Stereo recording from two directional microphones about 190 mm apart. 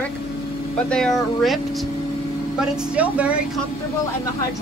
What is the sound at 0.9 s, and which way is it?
Speech, centre (ahead or behind).